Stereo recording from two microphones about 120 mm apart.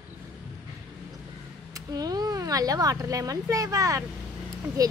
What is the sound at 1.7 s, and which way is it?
Speech, 30° right (ahead or behind).